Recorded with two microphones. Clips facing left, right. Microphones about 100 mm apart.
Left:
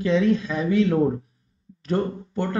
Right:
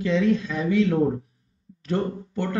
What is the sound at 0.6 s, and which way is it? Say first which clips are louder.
Speech: left 1 dB; 35° left (ahead or behind).